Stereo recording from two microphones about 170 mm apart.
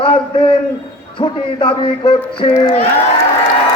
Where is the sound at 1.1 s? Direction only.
30° left (ahead or behind).